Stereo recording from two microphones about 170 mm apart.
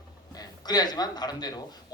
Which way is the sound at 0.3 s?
25° left (ahead or behind).